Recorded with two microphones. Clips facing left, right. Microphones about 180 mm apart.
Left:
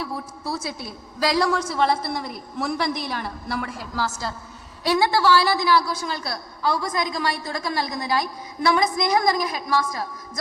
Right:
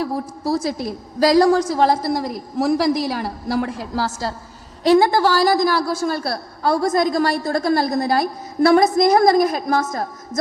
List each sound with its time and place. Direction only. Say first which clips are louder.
0.2 s a woman's voice: right 8 dB; 40° right (ahead or behind)